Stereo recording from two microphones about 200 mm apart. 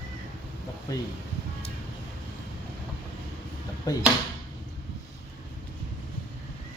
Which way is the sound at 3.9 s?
20° left (ahead or behind).